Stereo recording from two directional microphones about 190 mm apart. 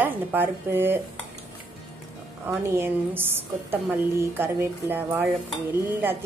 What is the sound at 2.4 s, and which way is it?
A woman's voice, 15° right (ahead or behind).